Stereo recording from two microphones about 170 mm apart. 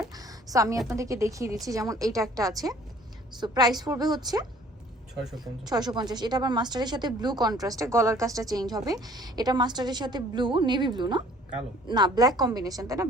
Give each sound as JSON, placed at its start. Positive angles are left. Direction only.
{"t": 0.1, "sound": "a sound", "side_deg": -20}
{"t": 0.9, "sound": "speech", "side_deg": -20}
{"t": 5.6, "sound": "speech", "side_deg": -25}